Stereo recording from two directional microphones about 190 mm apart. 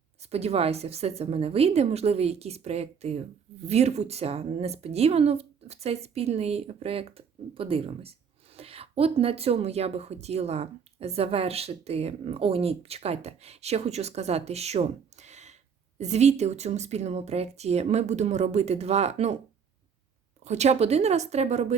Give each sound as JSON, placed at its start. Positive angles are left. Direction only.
{"t": 0.2, "sound": "a woman's voice", "side_deg": -35}
{"t": 20.4, "sound": "a woman's voice", "side_deg": -35}